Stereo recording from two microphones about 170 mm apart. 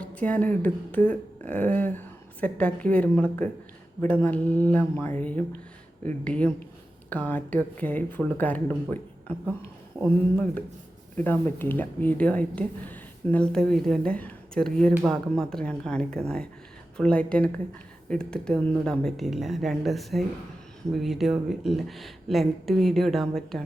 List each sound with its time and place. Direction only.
0.0 s speech: 10° left (ahead or behind)